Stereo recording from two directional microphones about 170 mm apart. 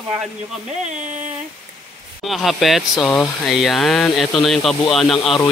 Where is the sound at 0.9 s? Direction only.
45° right (ahead or behind).